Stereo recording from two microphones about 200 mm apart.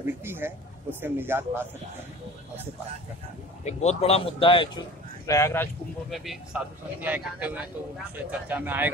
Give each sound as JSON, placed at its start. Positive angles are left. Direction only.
{"t": 0.0, "sound": "speech", "side_deg": -10}
{"t": 3.6, "sound": "speech", "side_deg": 30}
{"t": 5.2, "sound": "speech", "side_deg": 15}
{"t": 6.0, "sound": "speech", "side_deg": 0}